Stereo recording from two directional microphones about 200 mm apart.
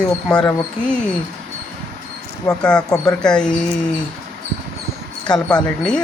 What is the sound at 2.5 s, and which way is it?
Speech, 5° left (ahead or behind).